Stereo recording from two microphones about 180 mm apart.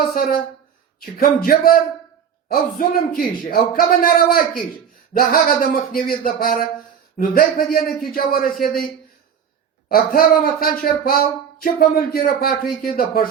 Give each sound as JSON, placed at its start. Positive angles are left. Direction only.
{"t": 0.1, "sound": "speech", "side_deg": 55}
{"t": 8.5, "sound": "a man's voice", "side_deg": 0}
{"t": 9.9, "sound": "speech", "side_deg": 55}